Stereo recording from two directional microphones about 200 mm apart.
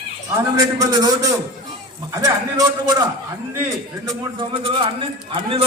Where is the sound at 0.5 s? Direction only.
20° right (ahead or behind).